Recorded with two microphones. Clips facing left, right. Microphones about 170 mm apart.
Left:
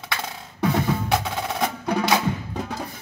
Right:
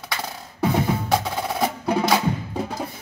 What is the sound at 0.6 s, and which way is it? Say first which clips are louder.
Percussion: right 1 dB; 20° right (ahead or behind).